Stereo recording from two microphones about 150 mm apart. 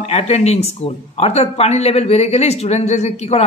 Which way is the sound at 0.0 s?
45° left (ahead or behind).